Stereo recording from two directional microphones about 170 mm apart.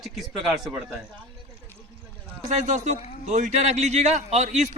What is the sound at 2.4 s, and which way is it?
A man's voice, 45° right (ahead or behind).